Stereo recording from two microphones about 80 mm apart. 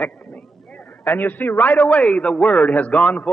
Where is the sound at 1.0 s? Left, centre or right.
Left.